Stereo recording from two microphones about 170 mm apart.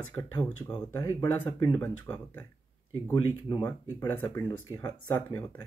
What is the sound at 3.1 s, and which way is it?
Speech, 25° left (ahead or behind).